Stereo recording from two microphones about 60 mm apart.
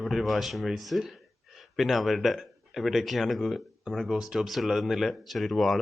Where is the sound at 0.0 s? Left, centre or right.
Centre.